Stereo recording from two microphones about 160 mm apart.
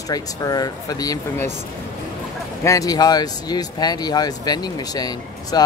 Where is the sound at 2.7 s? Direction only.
20° left (ahead or behind).